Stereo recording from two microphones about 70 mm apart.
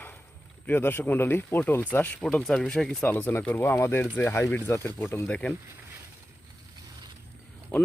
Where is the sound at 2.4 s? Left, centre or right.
Centre.